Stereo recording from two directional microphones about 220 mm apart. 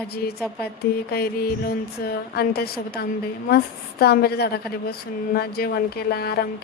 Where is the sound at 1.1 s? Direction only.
45° left (ahead or behind).